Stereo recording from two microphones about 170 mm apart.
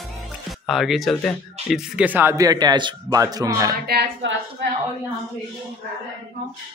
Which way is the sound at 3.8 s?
75° right (ahead or behind).